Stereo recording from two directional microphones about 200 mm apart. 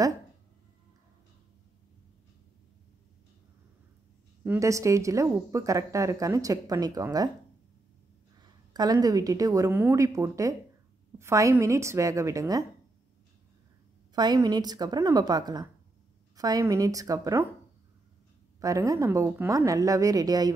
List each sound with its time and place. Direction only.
4.5 s a woman's voice: 15° right (ahead or behind)
8.4 s a woman's voice: 20° right (ahead or behind)
14.1 s a woman's voice: 20° right (ahead or behind)
18.6 s a woman's voice: 15° right (ahead or behind)